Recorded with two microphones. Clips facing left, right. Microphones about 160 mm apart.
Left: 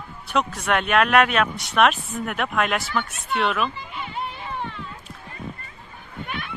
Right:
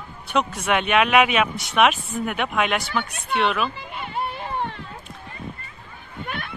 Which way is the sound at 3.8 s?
55° right (ahead or behind).